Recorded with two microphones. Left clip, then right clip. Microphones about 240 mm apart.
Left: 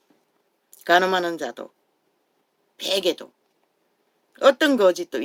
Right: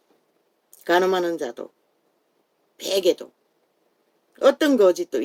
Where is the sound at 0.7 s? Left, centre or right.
Left.